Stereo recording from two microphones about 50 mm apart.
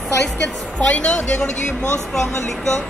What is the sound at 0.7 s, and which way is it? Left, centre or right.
Speech, left.